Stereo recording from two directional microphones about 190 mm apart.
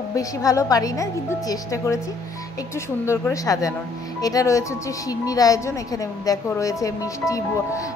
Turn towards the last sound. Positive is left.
turn(degrees=15)  # may be behind; listen again after turning